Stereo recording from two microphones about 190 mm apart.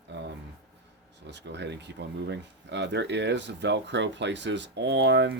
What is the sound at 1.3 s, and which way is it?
Speech, 65° right (ahead or behind).